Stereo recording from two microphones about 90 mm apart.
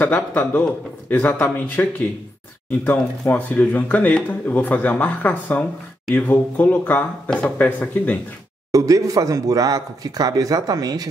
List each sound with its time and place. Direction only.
0.0 s speech: 20° left (ahead or behind)
8.7 s speech: 40° right (ahead or behind)